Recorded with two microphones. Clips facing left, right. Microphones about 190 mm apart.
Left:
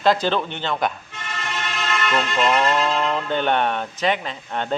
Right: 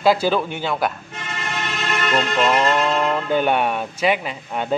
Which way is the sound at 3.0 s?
10° right (ahead or behind).